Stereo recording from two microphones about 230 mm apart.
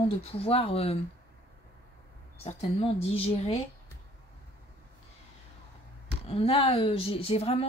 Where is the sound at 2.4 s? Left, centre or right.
Left.